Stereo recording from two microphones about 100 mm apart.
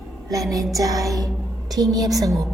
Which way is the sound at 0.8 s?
35° right (ahead or behind).